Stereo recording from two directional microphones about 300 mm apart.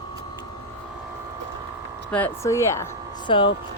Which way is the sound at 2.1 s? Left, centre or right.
Centre.